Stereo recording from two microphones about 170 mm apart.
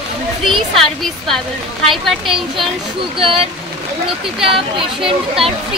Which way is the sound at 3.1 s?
30° right (ahead or behind).